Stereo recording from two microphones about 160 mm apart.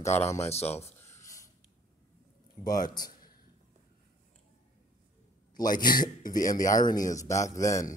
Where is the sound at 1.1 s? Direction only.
20° left (ahead or behind).